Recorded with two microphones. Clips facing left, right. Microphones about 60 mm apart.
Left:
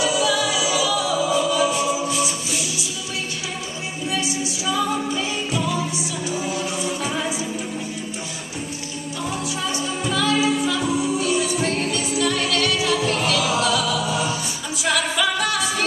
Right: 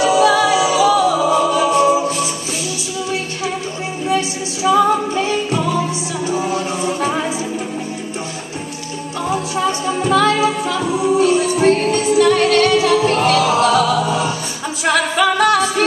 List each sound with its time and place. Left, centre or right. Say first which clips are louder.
0.0 s music: right 8 dB; right
4.6 s music: right 10 dB; right
9.3 s music: right 9 dB; right